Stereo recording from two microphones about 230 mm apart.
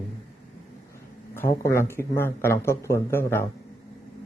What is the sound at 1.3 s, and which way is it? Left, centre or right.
Speech, centre.